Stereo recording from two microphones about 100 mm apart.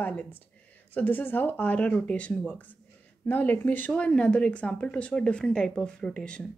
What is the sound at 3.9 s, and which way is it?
A woman's voice, 10° left (ahead or behind).